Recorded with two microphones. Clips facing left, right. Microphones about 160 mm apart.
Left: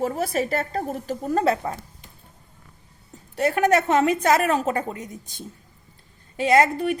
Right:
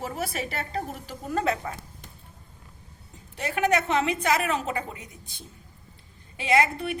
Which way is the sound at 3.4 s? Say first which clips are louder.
Left 5 dB; 45° left (ahead or behind).